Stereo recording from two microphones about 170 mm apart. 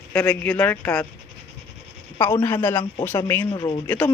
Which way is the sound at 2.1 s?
15° left (ahead or behind).